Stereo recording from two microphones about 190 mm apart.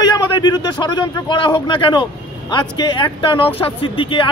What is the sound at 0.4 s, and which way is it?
Speech, 20° left (ahead or behind).